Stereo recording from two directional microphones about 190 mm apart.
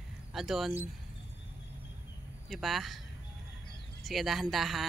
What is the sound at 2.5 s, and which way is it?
Speech, centre (ahead or behind).